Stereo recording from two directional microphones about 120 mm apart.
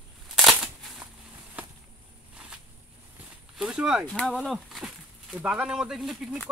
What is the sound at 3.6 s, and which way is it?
Speech, 5° right (ahead or behind).